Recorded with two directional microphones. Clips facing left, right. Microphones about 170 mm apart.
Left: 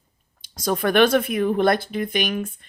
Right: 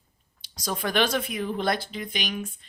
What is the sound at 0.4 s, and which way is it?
Speech, 50° left (ahead or behind).